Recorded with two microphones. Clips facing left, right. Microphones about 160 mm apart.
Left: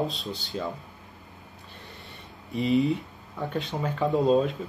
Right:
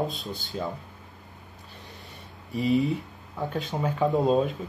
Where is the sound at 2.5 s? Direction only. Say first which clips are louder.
Left 1 dB; centre (ahead or behind).